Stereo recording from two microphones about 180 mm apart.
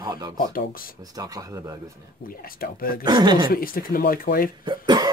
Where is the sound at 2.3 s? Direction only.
55° left (ahead or behind).